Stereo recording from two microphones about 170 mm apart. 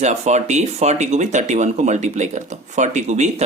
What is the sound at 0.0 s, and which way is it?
Speech, 40° right (ahead or behind).